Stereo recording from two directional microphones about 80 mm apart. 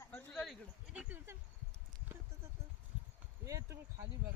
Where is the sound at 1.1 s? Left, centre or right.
Right.